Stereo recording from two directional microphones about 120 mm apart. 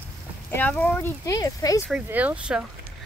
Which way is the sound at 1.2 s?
30° left (ahead or behind).